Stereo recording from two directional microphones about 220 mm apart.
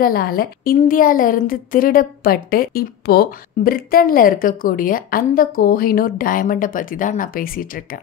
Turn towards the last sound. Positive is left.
turn(degrees=40)  # may be behind; listen again after turning